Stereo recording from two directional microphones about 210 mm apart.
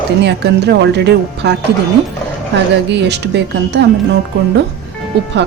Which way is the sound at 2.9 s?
55° right (ahead or behind).